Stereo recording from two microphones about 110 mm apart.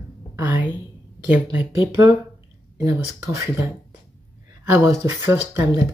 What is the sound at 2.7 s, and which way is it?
Speech, 30° right (ahead or behind).